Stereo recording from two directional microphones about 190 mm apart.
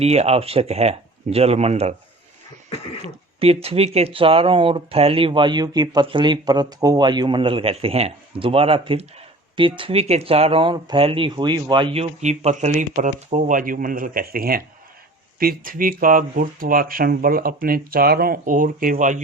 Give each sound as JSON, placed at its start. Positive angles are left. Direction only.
{"t": 0.0, "sound": "speech", "side_deg": -35}
{"t": 3.4, "sound": "speech", "side_deg": -30}